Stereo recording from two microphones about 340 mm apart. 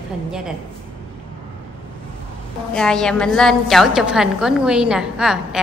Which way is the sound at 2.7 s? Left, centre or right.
Centre.